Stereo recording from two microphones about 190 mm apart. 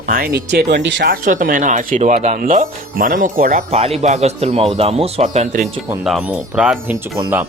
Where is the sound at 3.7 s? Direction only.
35° right (ahead or behind).